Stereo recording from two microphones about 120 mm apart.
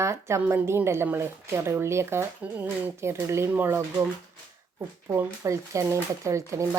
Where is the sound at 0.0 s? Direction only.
25° right (ahead or behind).